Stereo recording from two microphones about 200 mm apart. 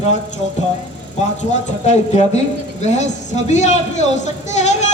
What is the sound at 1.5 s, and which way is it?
Speech, 35° left (ahead or behind).